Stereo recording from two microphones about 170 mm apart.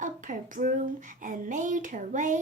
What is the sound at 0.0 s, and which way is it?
Speech, 50° right (ahead or behind).